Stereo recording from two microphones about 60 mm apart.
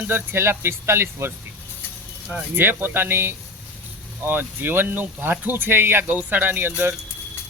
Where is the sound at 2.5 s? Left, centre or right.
Right.